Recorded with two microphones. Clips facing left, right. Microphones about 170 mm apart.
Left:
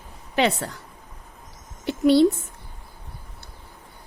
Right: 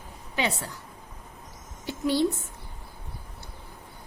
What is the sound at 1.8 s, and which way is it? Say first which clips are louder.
Speech: left 8 dB; 70° left (ahead or behind).